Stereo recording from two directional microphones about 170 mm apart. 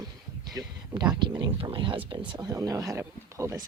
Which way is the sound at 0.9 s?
25° right (ahead or behind).